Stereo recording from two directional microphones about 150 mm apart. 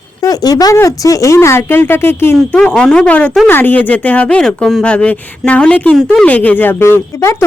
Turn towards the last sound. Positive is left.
turn(degrees=15)  # may be behind; listen again after turning